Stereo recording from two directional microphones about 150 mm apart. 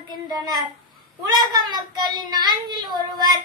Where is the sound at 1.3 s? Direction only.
30° right (ahead or behind).